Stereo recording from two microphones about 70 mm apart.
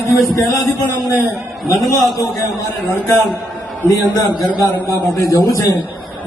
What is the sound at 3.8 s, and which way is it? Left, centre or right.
A man's voice, left.